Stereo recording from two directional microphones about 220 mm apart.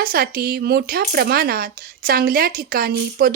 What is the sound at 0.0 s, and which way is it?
Speech, 45° right (ahead or behind).